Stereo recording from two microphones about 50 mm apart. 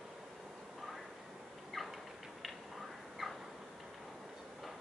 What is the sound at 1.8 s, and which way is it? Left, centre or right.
Cat, centre.